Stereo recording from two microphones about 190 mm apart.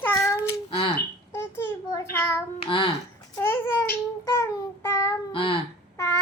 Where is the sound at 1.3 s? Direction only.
15° left (ahead or behind).